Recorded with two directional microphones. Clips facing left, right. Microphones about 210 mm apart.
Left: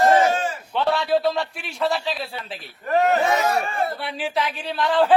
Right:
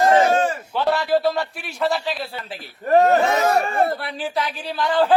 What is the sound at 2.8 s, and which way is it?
Speech, 40° right (ahead or behind).